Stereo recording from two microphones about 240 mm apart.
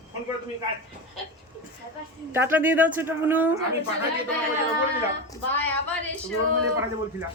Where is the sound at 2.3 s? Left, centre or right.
Centre.